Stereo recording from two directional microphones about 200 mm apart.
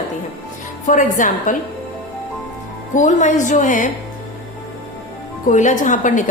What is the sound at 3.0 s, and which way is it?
Speech, 40° left (ahead or behind).